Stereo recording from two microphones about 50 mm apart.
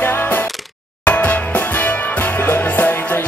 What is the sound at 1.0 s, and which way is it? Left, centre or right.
Music, left.